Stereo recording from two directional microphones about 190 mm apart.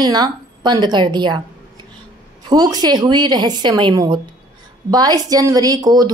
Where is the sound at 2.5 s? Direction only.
20° right (ahead or behind).